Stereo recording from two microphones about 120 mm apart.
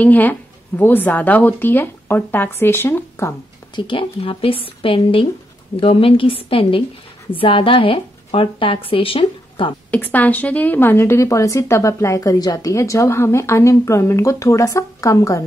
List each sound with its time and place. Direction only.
0.0 s speech: 15° left (ahead or behind)
3.7 s a woman's voice: 45° left (ahead or behind)
9.8 s a woman's voice: 15° left (ahead or behind)